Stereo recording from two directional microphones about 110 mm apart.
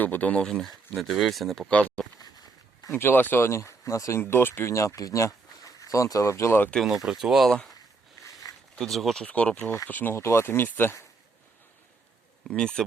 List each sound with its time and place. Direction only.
0.0 s speech: 15° left (ahead or behind)
2.1 s a sound: 35° left (ahead or behind)
2.9 s speech: 20° left (ahead or behind)
6.8 s speech: 5° right (ahead or behind)
8.2 s a sound: 25° left (ahead or behind)
8.7 s speech: centre (ahead or behind)
9.2 s speech: 10° left (ahead or behind)
12.5 s speech: 10° left (ahead or behind)